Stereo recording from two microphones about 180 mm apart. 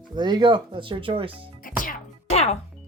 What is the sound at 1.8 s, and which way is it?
Music, 40° left (ahead or behind).